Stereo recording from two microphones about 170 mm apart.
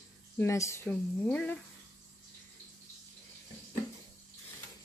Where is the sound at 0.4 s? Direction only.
15° left (ahead or behind).